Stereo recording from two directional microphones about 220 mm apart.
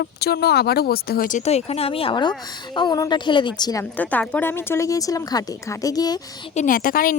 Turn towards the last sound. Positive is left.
turn(degrees=40)  # may be behind; listen again after turning